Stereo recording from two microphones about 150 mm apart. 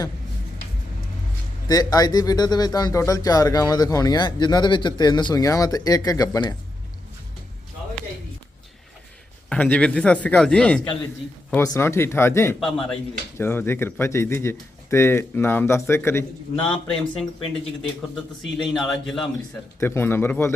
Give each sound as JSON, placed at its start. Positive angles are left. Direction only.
{"t": 1.6, "sound": "speech", "side_deg": 25}
{"t": 9.5, "sound": "speech", "side_deg": 10}
{"t": 11.5, "sound": "speech", "side_deg": 20}
{"t": 12.5, "sound": "a man's voice", "side_deg": 0}
{"t": 13.4, "sound": "a man's voice", "side_deg": 15}
{"t": 19.8, "sound": "speech", "side_deg": 15}